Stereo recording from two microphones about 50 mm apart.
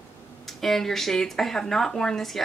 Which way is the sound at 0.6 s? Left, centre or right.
Centre.